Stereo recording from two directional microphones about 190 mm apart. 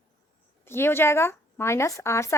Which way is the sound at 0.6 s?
10° left (ahead or behind).